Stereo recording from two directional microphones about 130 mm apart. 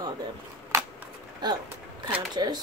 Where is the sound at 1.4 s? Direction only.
35° right (ahead or behind).